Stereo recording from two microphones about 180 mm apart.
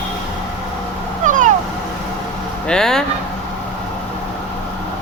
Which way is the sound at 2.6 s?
5° left (ahead or behind).